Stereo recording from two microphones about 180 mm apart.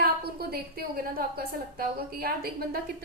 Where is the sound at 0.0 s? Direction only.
60° right (ahead or behind).